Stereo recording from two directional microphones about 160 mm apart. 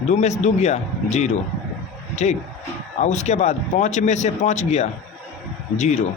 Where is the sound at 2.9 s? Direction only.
45° left (ahead or behind).